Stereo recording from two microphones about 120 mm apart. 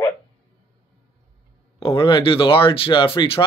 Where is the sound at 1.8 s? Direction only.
45° left (ahead or behind).